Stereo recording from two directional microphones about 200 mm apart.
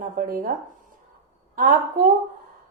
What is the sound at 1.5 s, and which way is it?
Speech, 40° right (ahead or behind).